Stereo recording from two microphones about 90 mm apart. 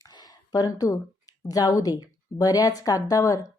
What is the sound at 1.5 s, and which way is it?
A woman's voice, 45° left (ahead or behind).